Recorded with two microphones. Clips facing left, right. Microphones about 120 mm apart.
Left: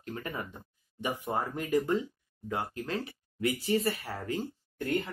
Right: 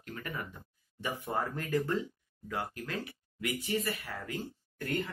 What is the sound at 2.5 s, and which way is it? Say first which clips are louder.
Speech: left 4 dB; 25° left (ahead or behind).